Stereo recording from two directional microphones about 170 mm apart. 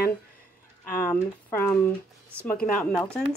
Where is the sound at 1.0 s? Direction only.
15° left (ahead or behind).